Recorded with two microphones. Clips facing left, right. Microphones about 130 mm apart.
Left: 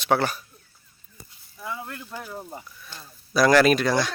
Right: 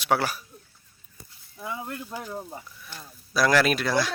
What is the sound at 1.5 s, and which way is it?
Speech, 20° right (ahead or behind).